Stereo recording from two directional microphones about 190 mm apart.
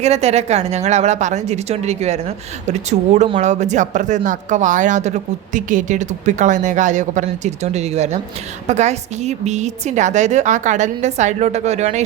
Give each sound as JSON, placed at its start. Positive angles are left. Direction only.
{"t": 0.0, "sound": "speech", "side_deg": -35}